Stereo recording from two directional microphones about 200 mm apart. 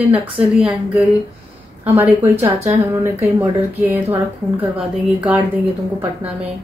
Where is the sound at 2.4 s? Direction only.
30° right (ahead or behind).